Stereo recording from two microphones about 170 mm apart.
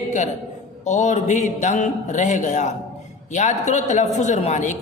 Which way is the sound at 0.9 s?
45° left (ahead or behind).